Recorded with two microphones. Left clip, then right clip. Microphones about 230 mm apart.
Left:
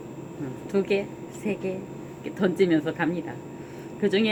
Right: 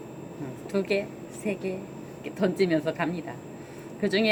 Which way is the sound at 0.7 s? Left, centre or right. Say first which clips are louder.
Left 2 dB; centre.